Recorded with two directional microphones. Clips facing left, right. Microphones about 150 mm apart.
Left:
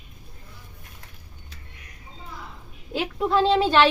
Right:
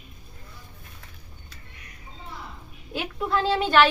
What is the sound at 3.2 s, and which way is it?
Speech, 25° left (ahead or behind).